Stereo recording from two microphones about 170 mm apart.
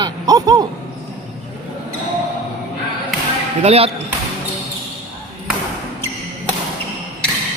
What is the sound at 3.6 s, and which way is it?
Speech, 35° right (ahead or behind).